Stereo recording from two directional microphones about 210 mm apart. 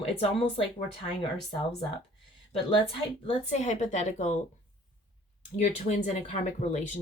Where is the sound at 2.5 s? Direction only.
25° left (ahead or behind).